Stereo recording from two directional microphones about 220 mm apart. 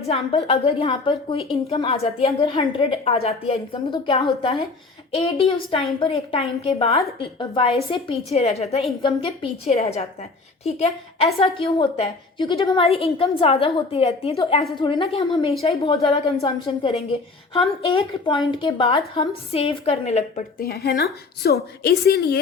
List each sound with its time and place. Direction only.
0.1 s a woman's voice: 25° left (ahead or behind); by 22.4 s 45° left (ahead or behind)